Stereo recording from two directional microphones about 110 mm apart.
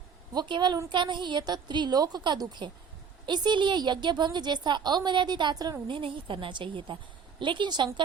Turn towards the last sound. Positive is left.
turn(degrees=-45)  # may be behind; listen again after turning